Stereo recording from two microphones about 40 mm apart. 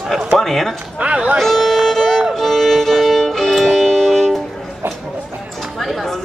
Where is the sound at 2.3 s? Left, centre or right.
Centre.